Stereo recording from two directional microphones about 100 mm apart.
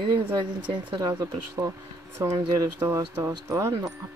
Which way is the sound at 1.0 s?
35° right (ahead or behind).